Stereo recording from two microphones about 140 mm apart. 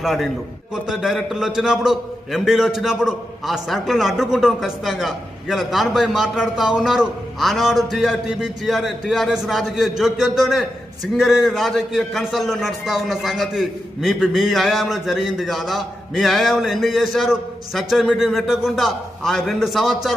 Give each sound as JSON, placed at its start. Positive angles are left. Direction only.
{"t": 0.0, "sound": "a man's voice", "side_deg": 0}